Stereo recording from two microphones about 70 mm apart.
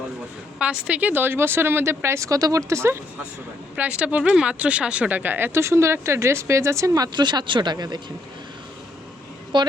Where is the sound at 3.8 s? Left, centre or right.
Centre; by 7.9 s right.